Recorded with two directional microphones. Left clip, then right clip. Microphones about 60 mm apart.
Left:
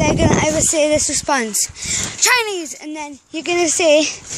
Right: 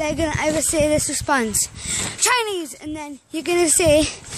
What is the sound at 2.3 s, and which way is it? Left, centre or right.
Speech, centre.